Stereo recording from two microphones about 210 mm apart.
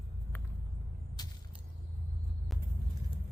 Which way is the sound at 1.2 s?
20° left (ahead or behind).